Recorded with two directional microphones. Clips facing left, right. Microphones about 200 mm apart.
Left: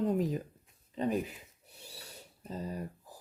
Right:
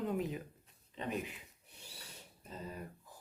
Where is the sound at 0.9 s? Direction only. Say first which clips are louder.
Left 8 dB; 40° left (ahead or behind).